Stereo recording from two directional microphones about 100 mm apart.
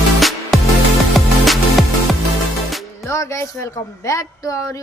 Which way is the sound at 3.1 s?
30° left (ahead or behind).